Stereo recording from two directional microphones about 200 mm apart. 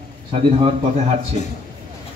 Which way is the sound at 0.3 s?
30° right (ahead or behind).